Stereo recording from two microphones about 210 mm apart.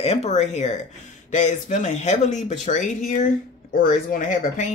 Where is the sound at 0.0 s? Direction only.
30° left (ahead or behind).